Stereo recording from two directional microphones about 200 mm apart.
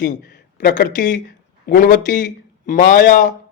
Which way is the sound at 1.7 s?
40° left (ahead or behind).